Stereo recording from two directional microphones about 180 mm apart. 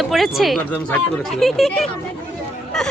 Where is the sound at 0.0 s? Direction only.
Centre (ahead or behind).